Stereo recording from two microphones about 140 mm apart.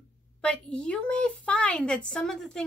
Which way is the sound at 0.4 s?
5° left (ahead or behind).